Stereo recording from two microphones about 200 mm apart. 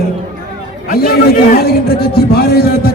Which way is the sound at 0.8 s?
50° left (ahead or behind).